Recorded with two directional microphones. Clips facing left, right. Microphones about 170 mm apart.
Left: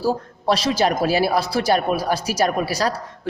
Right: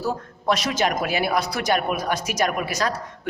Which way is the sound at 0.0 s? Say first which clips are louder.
Left 4 dB; 30° left (ahead or behind).